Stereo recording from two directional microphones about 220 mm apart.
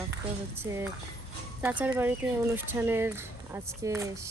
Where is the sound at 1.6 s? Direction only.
5° right (ahead or behind).